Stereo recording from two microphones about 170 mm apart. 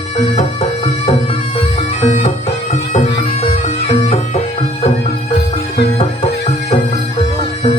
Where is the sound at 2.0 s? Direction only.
40° left (ahead or behind).